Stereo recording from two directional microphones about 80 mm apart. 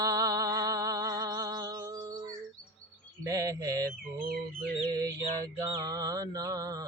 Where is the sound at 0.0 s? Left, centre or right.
Right.